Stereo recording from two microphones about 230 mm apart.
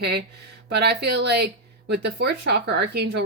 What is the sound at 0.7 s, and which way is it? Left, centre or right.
Speech, right.